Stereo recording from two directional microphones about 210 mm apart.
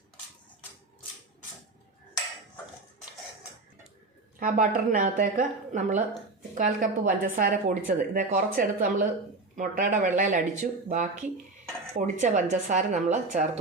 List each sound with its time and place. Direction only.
4.4 s a woman's voice: 40° right (ahead or behind)